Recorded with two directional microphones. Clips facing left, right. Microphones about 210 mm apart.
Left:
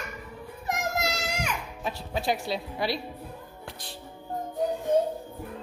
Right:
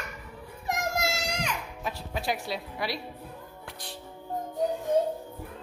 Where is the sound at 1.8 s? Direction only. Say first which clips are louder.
Left 3 dB; 25° left (ahead or behind).